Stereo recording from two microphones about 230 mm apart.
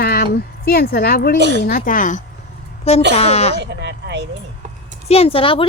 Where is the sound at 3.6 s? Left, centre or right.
Right.